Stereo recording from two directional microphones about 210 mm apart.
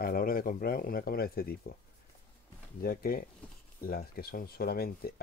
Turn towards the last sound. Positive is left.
turn(degrees=45)  # may be behind; listen again after turning